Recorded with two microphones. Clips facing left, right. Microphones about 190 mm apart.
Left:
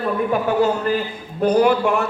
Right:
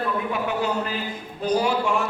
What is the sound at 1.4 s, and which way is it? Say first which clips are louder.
Speech: left 7 dB; 60° left (ahead or behind).